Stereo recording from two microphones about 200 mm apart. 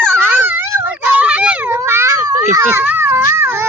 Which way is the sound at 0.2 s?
10° right (ahead or behind).